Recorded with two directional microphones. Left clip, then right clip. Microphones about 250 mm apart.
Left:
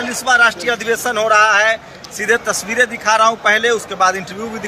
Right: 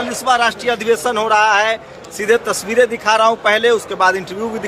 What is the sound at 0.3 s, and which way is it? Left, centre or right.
Speech, centre.